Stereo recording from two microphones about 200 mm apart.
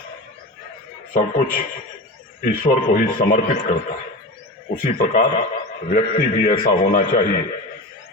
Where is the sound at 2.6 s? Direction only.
45° left (ahead or behind).